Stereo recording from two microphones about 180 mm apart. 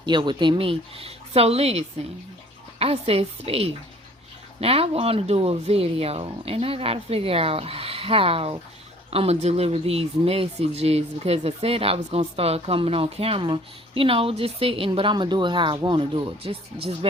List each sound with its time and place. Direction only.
0.0 s speech: 25° right (ahead or behind)